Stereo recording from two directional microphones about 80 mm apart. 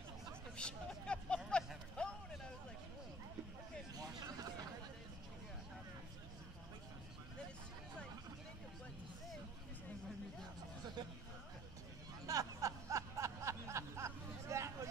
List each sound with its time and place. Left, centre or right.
0.6 s music: centre
2.0 s a sound: centre
3.9 s vehicle: right
12.3 s snicker: right